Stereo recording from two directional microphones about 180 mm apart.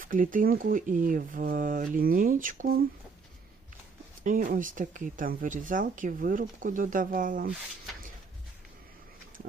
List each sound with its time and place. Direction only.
0.0 s speech: 50° right (ahead or behind)
4.2 s speech: 45° right (ahead or behind)